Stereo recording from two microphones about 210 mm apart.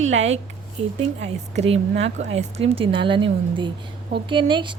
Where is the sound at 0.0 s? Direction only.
30° right (ahead or behind).